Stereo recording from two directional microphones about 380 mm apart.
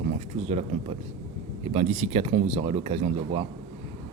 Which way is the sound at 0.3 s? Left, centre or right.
Centre.